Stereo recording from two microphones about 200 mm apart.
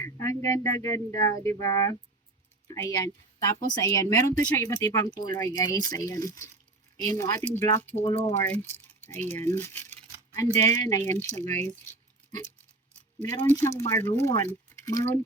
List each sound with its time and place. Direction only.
0.0 s speech: 15° left (ahead or behind)
7.9 s speech: 30° left (ahead or behind)
8.3 s speech: 10° left (ahead or behind)
13.2 s speech: 15° left (ahead or behind)